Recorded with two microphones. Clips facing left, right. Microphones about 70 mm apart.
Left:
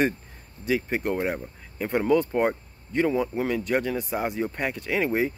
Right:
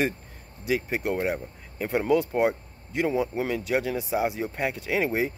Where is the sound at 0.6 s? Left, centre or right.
Centre.